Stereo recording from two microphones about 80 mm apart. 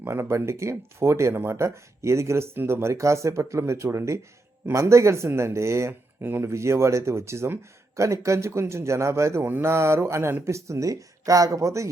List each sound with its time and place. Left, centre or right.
0.0 s speech: right